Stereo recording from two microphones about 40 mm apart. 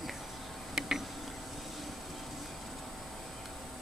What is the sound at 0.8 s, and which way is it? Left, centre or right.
Tick-tock, centre.